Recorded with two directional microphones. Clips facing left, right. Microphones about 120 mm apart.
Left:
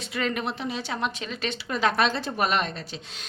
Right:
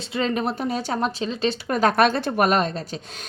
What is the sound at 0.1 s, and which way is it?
A woman's voice, 30° right (ahead or behind).